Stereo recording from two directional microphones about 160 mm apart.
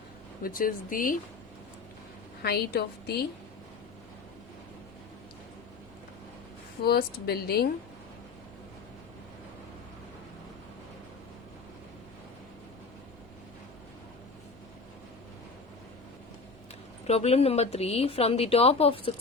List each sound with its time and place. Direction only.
0.4 s speech: 60° left (ahead or behind)
2.4 s a woman's voice: 85° left
6.8 s speech: 75° left (ahead or behind)
17.1 s a woman's voice: 40° left (ahead or behind)